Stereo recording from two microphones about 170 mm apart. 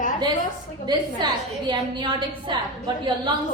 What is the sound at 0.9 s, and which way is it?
A woman's voice, 25° right (ahead or behind).